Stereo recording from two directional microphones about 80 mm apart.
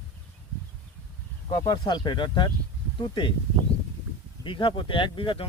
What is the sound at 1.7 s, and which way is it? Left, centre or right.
Speech, left.